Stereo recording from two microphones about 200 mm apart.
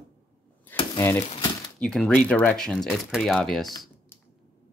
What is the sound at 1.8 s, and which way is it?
Speech, 5° left (ahead or behind).